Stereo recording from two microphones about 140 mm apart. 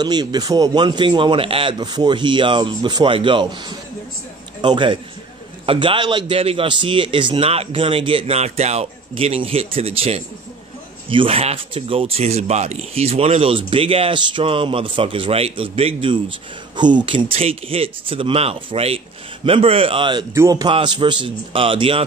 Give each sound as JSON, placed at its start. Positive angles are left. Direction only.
{"t": 0.0, "sound": "a man's voice", "side_deg": -30}
{"t": 20.3, "sound": "a man's voice", "side_deg": -20}
{"t": 20.6, "sound": "speech", "side_deg": -35}